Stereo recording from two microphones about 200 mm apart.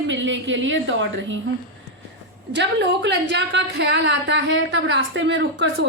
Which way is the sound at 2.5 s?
60° right (ahead or behind).